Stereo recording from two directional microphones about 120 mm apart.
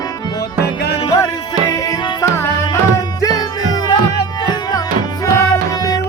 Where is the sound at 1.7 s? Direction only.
30° left (ahead or behind).